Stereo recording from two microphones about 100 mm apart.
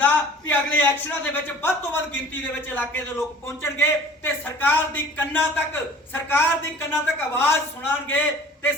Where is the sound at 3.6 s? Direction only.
20° left (ahead or behind).